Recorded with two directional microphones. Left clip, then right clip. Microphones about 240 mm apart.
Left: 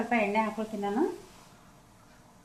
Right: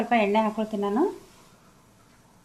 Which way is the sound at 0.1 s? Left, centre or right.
Right.